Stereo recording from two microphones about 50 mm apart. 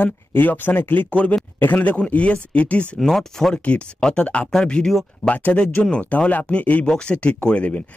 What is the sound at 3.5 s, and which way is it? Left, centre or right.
Speech, left.